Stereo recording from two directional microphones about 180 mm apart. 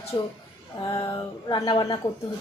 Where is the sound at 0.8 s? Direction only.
25° left (ahead or behind).